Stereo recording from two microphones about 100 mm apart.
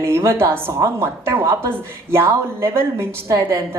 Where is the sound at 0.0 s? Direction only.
30° right (ahead or behind).